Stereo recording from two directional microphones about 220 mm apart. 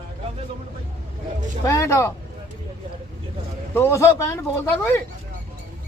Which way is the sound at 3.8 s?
10° left (ahead or behind).